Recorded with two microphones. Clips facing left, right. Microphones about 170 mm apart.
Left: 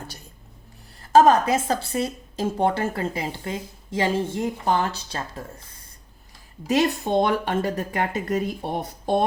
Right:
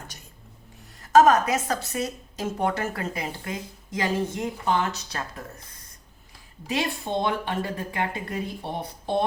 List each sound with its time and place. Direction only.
1.0 s a woman's voice: 30° left (ahead or behind)
6.7 s speech: 45° left (ahead or behind)